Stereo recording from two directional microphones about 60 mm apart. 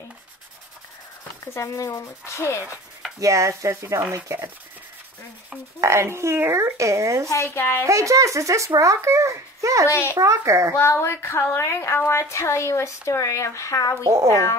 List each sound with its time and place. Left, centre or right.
1.4 s speech: left
3.2 s a child's voice: right
5.8 s a child's voice: right
7.4 s speech: left
7.8 s a child's voice: right
9.8 s speech: left
10.1 s a child's voice: right
10.8 s speech: left
14.0 s speech: right
14.3 s speech: left